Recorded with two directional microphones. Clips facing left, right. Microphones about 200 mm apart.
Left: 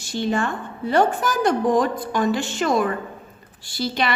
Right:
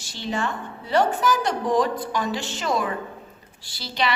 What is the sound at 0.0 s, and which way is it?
A woman's voice, 50° left (ahead or behind).